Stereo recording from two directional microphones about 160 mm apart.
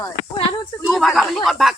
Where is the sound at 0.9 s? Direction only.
Centre (ahead or behind).